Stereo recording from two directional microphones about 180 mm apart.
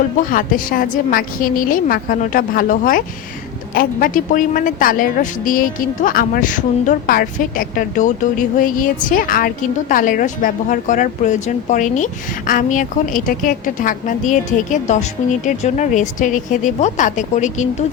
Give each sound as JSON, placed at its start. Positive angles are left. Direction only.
{"t": 0.3, "sound": "a woman's voice", "side_deg": 50}